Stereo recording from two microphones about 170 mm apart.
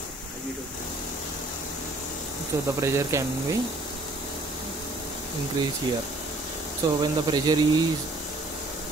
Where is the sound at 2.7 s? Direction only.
15° right (ahead or behind).